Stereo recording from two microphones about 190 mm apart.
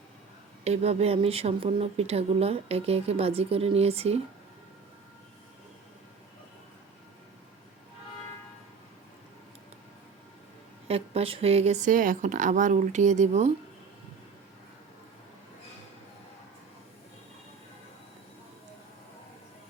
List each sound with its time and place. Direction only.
0.6 s speech: 35° right (ahead or behind)
10.8 s speech: 30° right (ahead or behind)